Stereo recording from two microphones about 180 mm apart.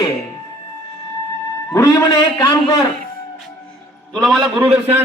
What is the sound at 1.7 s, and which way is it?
Speech, 20° left (ahead or behind).